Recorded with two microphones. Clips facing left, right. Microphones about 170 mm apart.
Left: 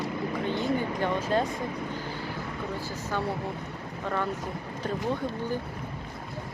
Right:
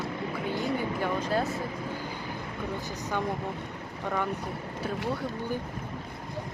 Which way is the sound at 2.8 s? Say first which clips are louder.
Even; 15° right (ahead or behind).